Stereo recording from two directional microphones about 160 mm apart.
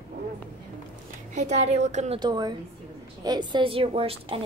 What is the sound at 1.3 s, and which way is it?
Speech, 45° right (ahead or behind).